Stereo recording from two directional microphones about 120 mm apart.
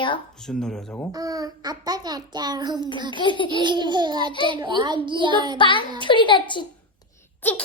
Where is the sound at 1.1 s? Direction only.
30° right (ahead or behind).